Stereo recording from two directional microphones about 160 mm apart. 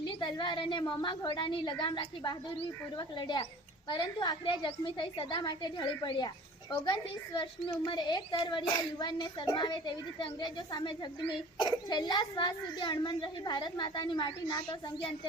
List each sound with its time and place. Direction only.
0.0 s a woman's voice: 30° left (ahead or behind)